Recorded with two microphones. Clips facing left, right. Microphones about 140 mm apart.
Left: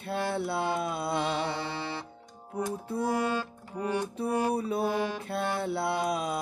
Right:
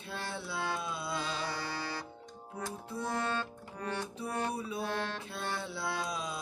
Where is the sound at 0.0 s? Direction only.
55° left (ahead or behind).